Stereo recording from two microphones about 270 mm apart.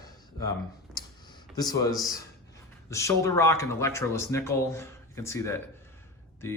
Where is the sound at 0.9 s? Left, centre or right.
Centre.